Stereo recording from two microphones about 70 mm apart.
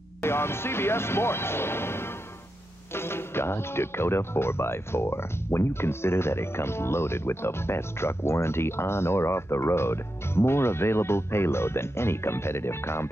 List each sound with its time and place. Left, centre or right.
0.2 s speech: left